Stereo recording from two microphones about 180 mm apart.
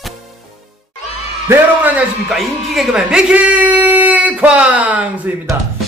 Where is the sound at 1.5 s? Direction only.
10° right (ahead or behind).